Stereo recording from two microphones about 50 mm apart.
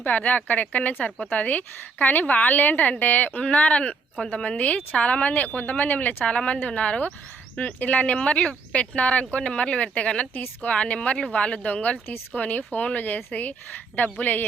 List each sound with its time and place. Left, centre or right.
0.0 s a woman's voice: left
10.3 s a woman's voice: left
10.7 s speech: left
12.0 s speech: left
12.4 s a woman's voice: left